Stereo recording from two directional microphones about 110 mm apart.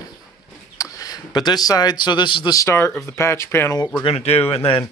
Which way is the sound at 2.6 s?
25° left (ahead or behind).